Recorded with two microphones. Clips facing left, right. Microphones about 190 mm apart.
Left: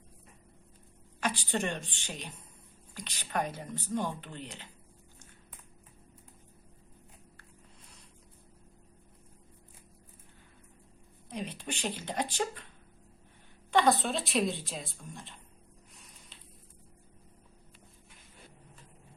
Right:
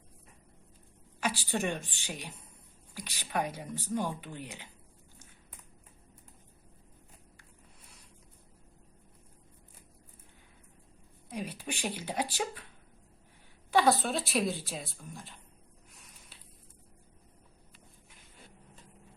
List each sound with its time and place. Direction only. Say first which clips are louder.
1.2 s speech: even; 5° right (ahead or behind)
11.3 s speech: even; 5° right (ahead or behind)
13.7 s speech: even; 5° right (ahead or behind)